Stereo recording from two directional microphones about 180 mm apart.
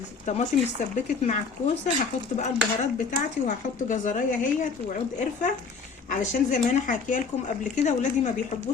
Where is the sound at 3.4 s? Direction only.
45° left (ahead or behind).